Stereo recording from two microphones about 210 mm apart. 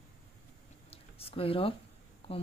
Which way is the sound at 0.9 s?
25° left (ahead or behind).